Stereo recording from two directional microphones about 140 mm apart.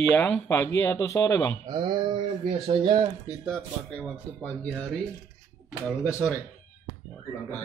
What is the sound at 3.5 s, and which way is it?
A man's voice, 10° left (ahead or behind).